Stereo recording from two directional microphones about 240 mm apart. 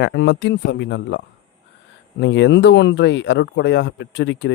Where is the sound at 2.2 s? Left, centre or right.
Left.